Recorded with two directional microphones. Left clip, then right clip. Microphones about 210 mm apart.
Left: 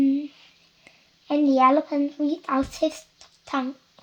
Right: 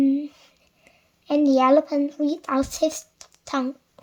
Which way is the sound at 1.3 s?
40° right (ahead or behind).